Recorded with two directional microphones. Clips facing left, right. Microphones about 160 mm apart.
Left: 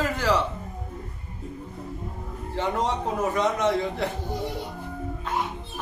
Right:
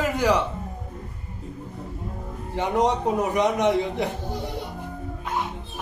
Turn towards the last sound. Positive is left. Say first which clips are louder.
# right 2 dB
turn(degrees=-15)  # may be behind; listen again after turning